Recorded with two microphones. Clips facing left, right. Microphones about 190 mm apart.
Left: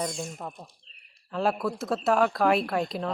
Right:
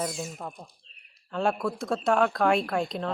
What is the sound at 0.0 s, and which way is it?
Speech, 5° right (ahead or behind).